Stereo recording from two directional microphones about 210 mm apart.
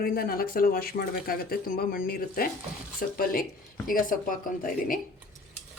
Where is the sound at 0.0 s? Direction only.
45° left (ahead or behind).